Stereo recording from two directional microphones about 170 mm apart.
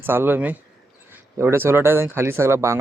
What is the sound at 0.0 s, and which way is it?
Speech, 15° right (ahead or behind).